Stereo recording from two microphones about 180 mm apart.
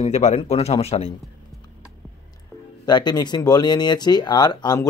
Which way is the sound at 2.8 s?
25° left (ahead or behind).